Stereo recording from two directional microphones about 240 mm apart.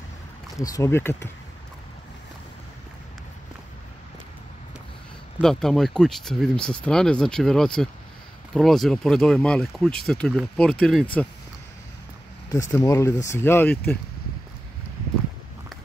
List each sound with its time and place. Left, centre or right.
0.6 s speech: centre
5.4 s speech: centre
12.7 s speech: centre